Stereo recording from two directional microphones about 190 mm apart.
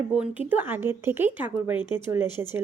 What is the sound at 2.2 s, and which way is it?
Speech, 20° left (ahead or behind).